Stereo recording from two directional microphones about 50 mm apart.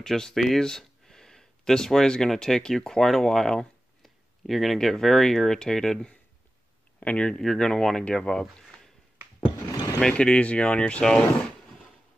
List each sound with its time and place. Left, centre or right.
0.0 s speech: centre
4.0 s a sound: centre
4.7 s speech: centre
7.0 s speech: left
9.9 s speech: centre